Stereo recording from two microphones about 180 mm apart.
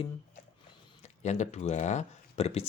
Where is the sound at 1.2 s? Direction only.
40° left (ahead or behind).